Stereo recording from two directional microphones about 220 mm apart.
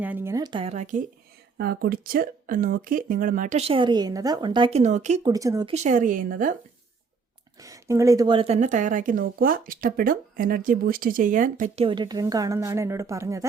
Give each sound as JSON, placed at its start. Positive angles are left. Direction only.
{"t": 0.0, "sound": "speech", "side_deg": -10}
{"t": 1.5, "sound": "speech", "side_deg": -45}
{"t": 5.2, "sound": "a woman's voice", "side_deg": -15}
{"t": 5.7, "sound": "speech", "side_deg": -35}
{"t": 7.6, "sound": "speech", "side_deg": -15}
{"t": 11.9, "sound": "a woman's voice", "side_deg": -20}